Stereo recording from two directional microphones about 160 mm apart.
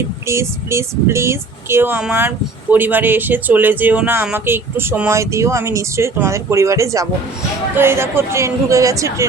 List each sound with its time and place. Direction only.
0.3 s speech: 15° right (ahead or behind)